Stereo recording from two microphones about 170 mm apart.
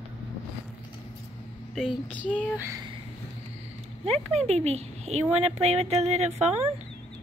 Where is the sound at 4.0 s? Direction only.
40° right (ahead or behind).